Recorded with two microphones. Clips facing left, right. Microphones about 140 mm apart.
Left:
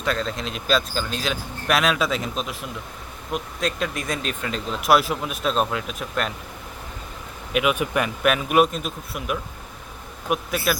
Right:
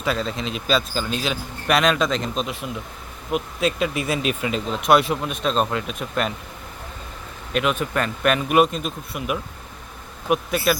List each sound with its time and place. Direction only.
0.0 s speech: 5° right (ahead or behind)
7.5 s speech: 10° left (ahead or behind)